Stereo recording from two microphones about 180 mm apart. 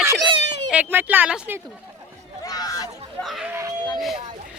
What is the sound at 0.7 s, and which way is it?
Speech, 10° right (ahead or behind).